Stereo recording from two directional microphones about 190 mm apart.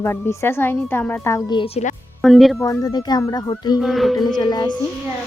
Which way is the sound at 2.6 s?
20° left (ahead or behind).